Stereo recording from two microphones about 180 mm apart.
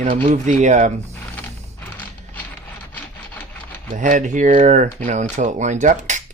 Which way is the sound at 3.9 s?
45° right (ahead or behind).